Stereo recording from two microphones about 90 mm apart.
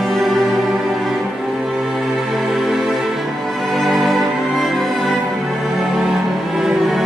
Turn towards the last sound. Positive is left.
turn(degrees=0)  # may be behind; listen again after turning